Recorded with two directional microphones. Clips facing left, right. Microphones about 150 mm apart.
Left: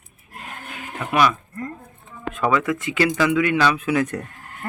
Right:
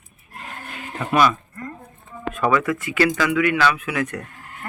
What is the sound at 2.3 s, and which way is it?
Speech, 15° left (ahead or behind).